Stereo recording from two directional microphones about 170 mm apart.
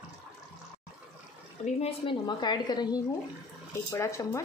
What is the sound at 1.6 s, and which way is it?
A woman's voice, 35° left (ahead or behind).